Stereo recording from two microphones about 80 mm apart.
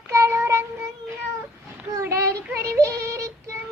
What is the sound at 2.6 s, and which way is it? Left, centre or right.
Synthetic singing, right.